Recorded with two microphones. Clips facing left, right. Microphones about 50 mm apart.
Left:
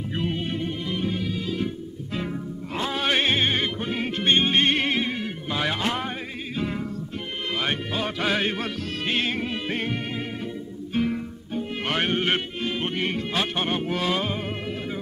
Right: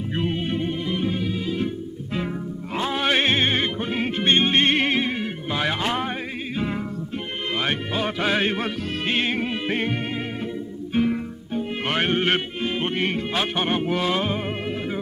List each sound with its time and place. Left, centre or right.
0.1 s music: centre
4.3 s music: right